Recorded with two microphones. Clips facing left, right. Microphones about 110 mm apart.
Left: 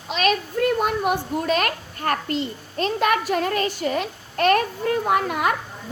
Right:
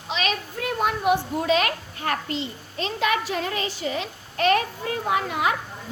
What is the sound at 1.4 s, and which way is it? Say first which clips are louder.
A child's voice: right 1 dB; 50° left (ahead or behind).